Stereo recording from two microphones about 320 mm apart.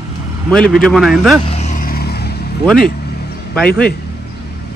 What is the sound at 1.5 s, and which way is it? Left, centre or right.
Vehicle, left.